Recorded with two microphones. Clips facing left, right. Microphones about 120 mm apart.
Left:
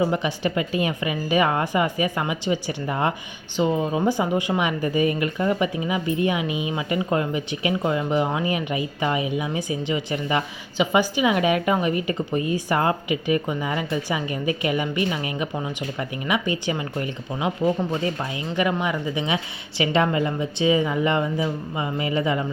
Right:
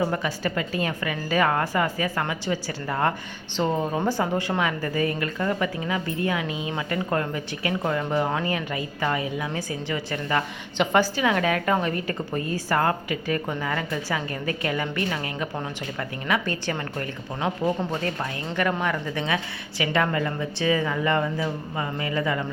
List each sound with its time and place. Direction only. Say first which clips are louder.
0.0 s a woman's voice: left 3 dB; 20° left (ahead or behind)